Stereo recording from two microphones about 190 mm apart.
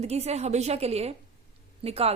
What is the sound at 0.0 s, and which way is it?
A woman's voice, 35° right (ahead or behind).